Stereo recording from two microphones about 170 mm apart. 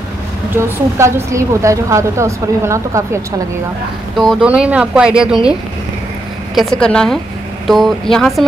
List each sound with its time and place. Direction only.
0.6 s a woman's voice: 15° right (ahead or behind)
4.2 s speech: centre (ahead or behind)
6.5 s speech: centre (ahead or behind)